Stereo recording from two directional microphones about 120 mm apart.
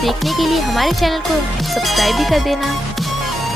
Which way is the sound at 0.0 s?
Centre (ahead or behind).